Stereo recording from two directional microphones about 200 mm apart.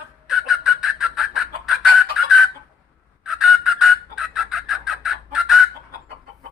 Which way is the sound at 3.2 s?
Centre (ahead or behind).